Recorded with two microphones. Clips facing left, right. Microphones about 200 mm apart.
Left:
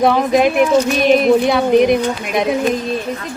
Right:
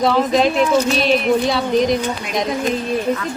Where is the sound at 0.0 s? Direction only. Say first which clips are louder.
Left 2 dB; 55° left (ahead or behind).